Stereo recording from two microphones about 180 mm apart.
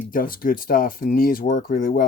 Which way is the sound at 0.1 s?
50° left (ahead or behind).